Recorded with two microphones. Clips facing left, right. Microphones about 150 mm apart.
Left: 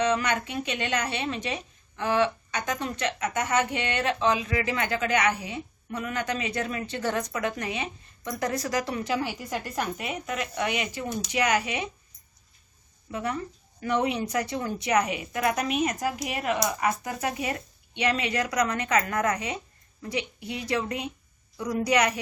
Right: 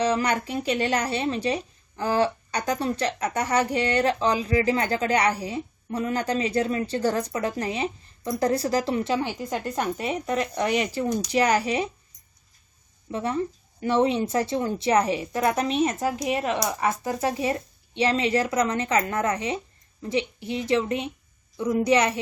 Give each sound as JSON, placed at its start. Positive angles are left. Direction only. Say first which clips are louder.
{"t": 0.0, "sound": "speech", "louder": "right 2 dB", "side_deg": -35}
{"t": 13.1, "sound": "speech", "louder": "right 4 dB", "side_deg": -25}